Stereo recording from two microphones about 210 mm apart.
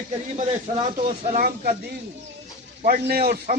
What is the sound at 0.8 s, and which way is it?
Speech, 30° right (ahead or behind).